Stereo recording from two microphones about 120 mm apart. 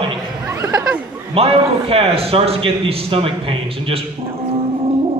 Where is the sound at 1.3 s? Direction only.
50° right (ahead or behind).